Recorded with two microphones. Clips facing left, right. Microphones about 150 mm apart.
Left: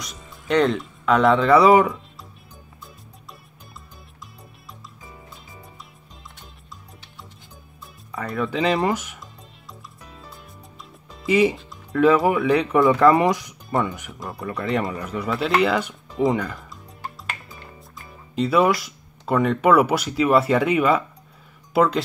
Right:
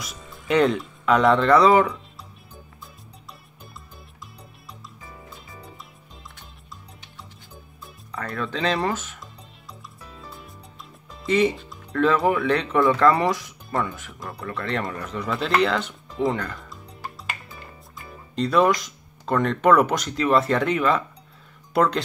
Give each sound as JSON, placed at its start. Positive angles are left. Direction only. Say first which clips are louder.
{"t": 0.0, "sound": "speech", "louder": "even", "side_deg": 0}
{"t": 8.1, "sound": "speech", "louder": "left 4 dB", "side_deg": 5}
{"t": 11.2, "sound": "speech", "louder": "left 2 dB", "side_deg": 5}
{"t": 14.2, "sound": "speech", "louder": "left 3 dB", "side_deg": 0}